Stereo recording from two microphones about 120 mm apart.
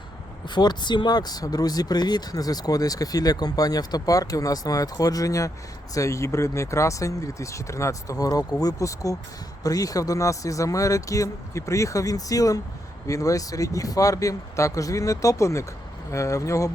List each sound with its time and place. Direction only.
0.4 s speech: 35° left (ahead or behind)